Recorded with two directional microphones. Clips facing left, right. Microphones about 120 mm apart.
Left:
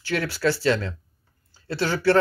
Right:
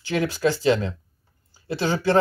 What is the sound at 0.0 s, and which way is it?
Speech, 20° right (ahead or behind).